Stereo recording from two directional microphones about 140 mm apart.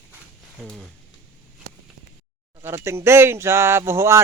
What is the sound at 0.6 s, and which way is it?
Speech, 5° left (ahead or behind).